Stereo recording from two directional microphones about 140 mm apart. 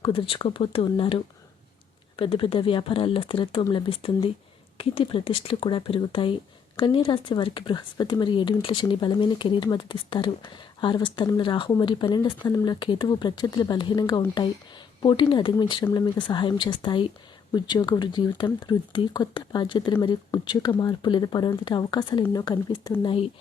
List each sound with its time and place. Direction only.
0.0 s speech: 40° left (ahead or behind)
14.0 s speech: 20° left (ahead or behind)
15.0 s speech: 35° left (ahead or behind)